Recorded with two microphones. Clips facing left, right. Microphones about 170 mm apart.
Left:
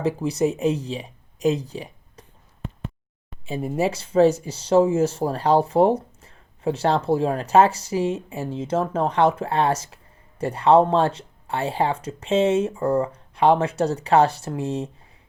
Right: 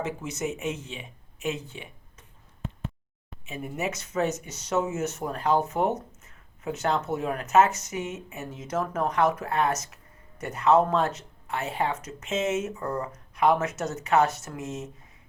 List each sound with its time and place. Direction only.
0.0 s speech: 35° left (ahead or behind)
3.4 s speech: 30° left (ahead or behind)